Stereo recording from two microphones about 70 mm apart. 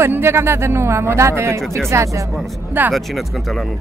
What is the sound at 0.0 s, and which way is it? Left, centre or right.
Speech, right.